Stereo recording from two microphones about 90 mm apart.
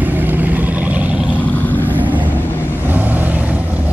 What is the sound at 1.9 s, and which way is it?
Vehicle, 20° right (ahead or behind).